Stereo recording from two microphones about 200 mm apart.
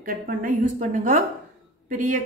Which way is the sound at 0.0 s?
40° right (ahead or behind).